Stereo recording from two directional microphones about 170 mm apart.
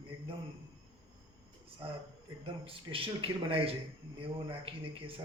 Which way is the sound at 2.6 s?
30° right (ahead or behind).